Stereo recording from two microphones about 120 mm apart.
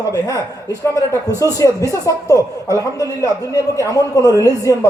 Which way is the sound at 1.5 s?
30° left (ahead or behind).